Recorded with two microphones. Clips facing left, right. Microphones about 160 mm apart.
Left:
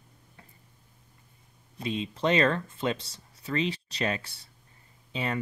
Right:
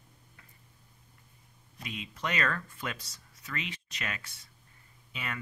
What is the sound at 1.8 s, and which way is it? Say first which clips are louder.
Speech: left 9 dB; 30° left (ahead or behind).